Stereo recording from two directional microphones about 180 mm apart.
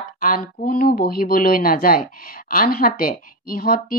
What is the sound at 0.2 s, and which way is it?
Speech, 50° left (ahead or behind).